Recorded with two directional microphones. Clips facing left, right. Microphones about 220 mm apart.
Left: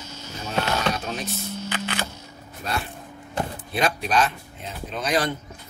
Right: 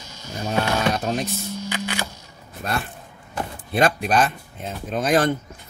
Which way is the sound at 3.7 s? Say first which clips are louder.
Right 4 dB; 50° right (ahead or behind).